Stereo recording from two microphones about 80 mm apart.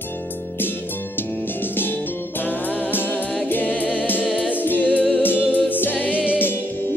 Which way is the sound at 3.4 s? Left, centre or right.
Left.